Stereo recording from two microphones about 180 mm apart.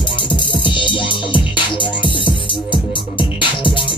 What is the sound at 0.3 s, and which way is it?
Music, 25° left (ahead or behind).